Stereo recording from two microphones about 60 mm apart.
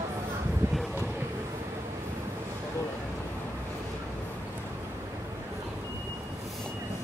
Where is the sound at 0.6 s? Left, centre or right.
Right.